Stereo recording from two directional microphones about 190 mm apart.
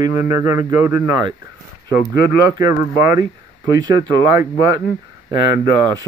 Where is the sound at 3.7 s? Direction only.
20° right (ahead or behind).